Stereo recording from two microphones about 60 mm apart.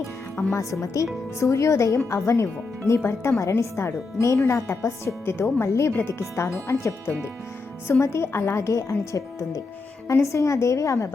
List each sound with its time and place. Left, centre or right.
0.5 s a woman's voice: left
8.7 s a woman's voice: left